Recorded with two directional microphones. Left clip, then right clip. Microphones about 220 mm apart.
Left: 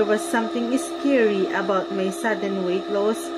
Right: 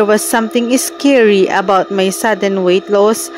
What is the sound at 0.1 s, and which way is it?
A woman's voice, 45° right (ahead or behind).